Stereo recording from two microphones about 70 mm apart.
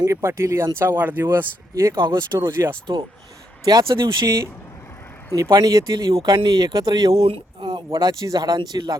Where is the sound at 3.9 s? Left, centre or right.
Right.